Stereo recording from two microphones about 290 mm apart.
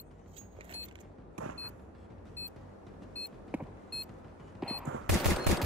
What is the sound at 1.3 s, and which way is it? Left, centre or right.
Vehicle, right.